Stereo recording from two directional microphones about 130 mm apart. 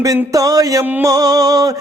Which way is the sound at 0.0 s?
30° right (ahead or behind).